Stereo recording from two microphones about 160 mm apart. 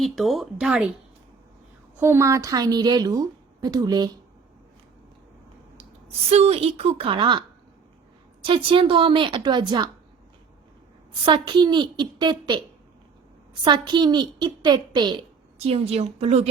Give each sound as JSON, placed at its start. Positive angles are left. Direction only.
{"t": 0.0, "sound": "speech", "side_deg": 0}
{"t": 2.0, "sound": "a woman's voice", "side_deg": -15}
{"t": 5.7, "sound": "a woman's voice", "side_deg": -40}
{"t": 11.3, "sound": "a woman's voice", "side_deg": -30}